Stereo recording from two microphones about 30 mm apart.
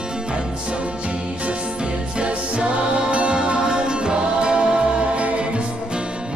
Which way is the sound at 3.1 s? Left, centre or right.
Right.